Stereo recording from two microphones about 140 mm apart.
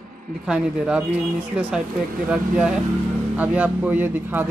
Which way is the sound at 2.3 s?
5° right (ahead or behind).